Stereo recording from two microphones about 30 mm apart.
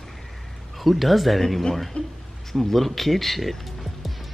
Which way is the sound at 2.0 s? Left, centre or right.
Left.